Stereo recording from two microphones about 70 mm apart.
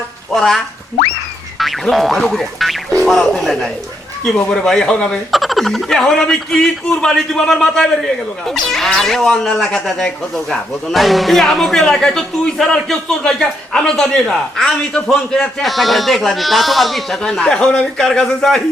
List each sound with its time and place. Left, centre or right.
0.3 s speech: centre
4.4 s speech: centre
5.3 s speech: centre
17.2 s speech: centre